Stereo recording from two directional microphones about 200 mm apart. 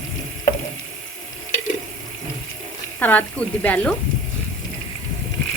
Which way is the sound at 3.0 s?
10° left (ahead or behind).